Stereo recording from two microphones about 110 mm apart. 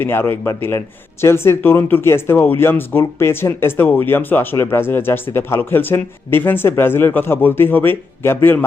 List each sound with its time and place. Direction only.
0.0 s speech: 20° left (ahead or behind)